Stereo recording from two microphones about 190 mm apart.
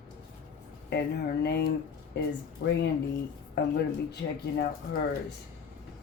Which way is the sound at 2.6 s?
55° left (ahead or behind).